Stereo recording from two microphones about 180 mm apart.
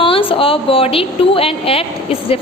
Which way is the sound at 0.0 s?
30° left (ahead or behind).